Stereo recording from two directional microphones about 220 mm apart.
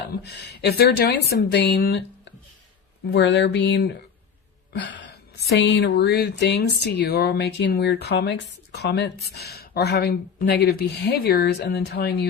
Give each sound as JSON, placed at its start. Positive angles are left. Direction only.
{"t": 0.3, "sound": "speech", "side_deg": 45}
{"t": 4.7, "sound": "a sound", "side_deg": 55}
{"t": 5.5, "sound": "speech", "side_deg": 55}